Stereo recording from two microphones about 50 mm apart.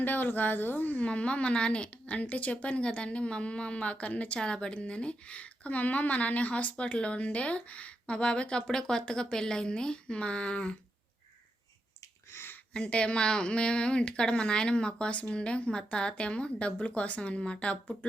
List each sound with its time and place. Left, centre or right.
0.0 s speech: left
1.0 s a woman's voice: left
12.3 s a sound: left
12.7 s speech: left